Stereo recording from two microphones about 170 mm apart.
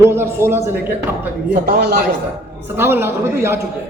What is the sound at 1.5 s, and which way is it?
Speech, 70° right (ahead or behind).